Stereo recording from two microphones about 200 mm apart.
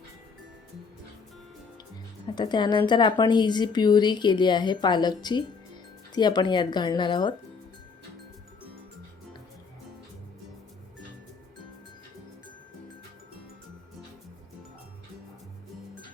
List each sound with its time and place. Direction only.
2.2 s speech: 20° left (ahead or behind)